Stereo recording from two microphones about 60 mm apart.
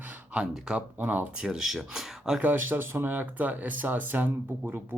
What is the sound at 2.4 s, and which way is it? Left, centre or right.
Speech, right.